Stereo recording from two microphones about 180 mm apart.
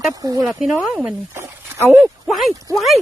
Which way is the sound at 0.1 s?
20° right (ahead or behind).